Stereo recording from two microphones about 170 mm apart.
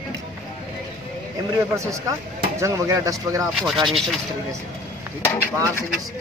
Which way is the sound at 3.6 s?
Centre (ahead or behind).